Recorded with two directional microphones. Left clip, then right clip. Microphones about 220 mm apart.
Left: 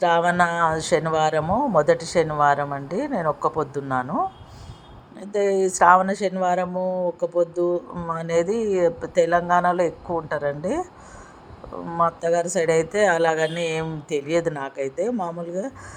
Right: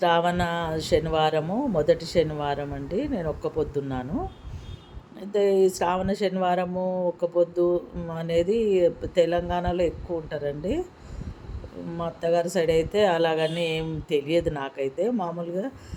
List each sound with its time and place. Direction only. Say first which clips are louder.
0.0 s speech: left 4 dB; 5° left (ahead or behind)
5.2 s speech: even; 5° left (ahead or behind)
6.7 s speech: left 3 dB; 25° left (ahead or behind)
7.2 s speech: right 1 dB; 5° left (ahead or behind)
11.9 s speech: left 4 dB; 5° left (ahead or behind)